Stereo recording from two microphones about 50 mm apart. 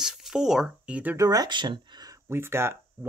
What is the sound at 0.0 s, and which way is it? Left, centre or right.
Speech, centre.